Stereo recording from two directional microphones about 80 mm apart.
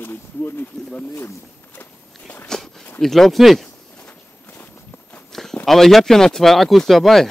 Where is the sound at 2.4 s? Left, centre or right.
Centre.